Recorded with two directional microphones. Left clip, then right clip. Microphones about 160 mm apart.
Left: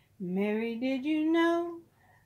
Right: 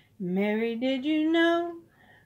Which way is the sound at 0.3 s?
10° left (ahead or behind).